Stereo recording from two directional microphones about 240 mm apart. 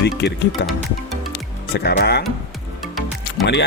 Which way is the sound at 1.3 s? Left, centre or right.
Left.